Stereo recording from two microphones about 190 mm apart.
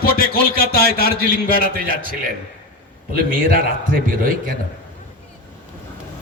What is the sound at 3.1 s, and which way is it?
A man's voice, 50° right (ahead or behind).